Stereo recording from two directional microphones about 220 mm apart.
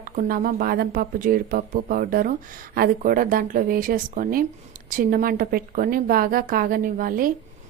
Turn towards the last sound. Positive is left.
turn(degrees=-40)  # may be behind; listen again after turning